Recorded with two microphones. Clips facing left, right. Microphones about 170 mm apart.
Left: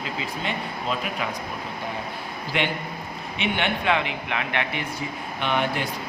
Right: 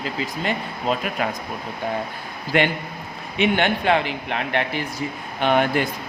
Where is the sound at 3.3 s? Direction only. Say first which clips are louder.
Right 6 dB; 45° right (ahead or behind).